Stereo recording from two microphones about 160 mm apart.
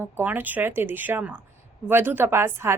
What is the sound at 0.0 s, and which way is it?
A woman's voice, 10° right (ahead or behind).